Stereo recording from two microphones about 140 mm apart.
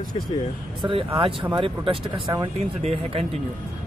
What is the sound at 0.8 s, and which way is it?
Speech, 40° right (ahead or behind).